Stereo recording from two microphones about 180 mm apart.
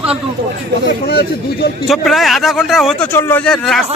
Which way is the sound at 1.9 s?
Centre (ahead or behind).